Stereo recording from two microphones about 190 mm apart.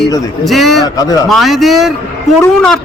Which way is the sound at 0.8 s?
20° left (ahead or behind).